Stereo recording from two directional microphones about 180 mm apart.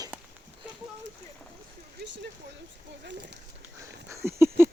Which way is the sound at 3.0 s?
75° right (ahead or behind).